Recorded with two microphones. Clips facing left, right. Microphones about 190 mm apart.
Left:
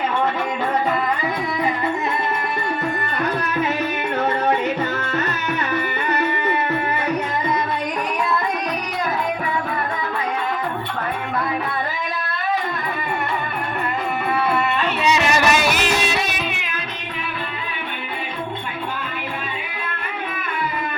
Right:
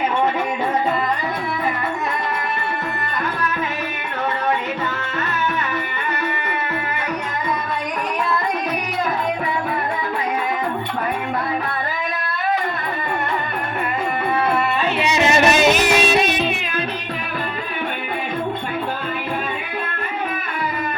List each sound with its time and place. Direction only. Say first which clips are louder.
15.0 s music: right 2 dB; 25° right (ahead or behind)